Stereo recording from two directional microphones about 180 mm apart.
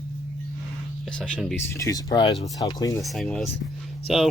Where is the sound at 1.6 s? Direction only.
15° left (ahead or behind).